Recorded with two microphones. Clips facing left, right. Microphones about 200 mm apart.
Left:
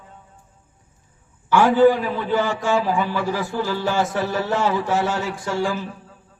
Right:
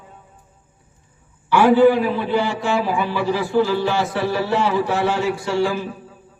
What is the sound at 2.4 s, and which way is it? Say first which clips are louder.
Speech: even; 45° left (ahead or behind).